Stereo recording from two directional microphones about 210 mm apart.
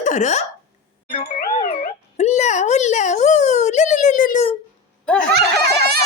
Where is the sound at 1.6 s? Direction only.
30° left (ahead or behind).